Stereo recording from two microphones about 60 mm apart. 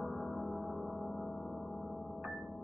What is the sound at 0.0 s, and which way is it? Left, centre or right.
Music, centre.